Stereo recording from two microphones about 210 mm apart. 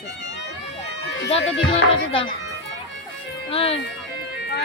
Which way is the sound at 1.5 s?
25° left (ahead or behind).